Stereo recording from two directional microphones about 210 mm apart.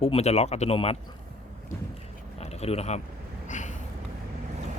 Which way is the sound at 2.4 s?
30° left (ahead or behind).